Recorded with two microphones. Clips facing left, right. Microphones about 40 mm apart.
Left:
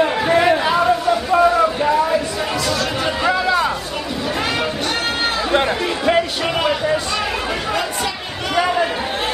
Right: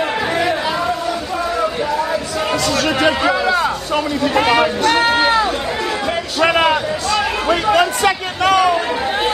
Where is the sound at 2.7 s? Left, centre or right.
Right.